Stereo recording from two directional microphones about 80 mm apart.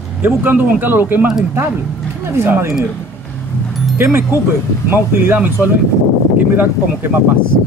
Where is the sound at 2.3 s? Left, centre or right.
Right.